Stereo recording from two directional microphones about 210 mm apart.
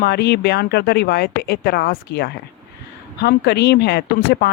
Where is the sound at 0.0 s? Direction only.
50° left (ahead or behind).